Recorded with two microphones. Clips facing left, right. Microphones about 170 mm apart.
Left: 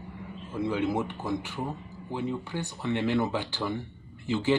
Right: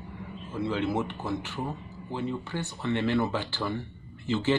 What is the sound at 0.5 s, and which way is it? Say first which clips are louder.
Speech: left 1 dB; 15° left (ahead or behind).